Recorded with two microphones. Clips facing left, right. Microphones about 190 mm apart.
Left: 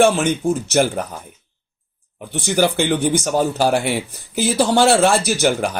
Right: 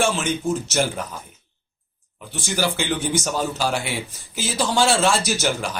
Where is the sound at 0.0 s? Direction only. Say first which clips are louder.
Left 7 dB; 60° left (ahead or behind).